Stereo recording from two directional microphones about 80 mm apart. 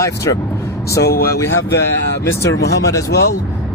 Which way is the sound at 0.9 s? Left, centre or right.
Left.